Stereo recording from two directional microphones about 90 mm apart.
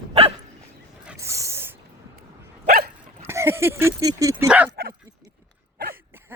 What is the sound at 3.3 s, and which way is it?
Speech, 30° right (ahead or behind).